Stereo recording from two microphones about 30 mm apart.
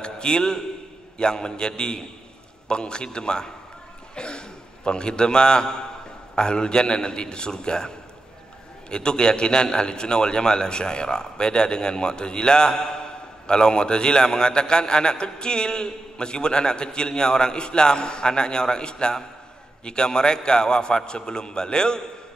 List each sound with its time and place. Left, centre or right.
0.0 s a man's voice: left
8.9 s a man's voice: left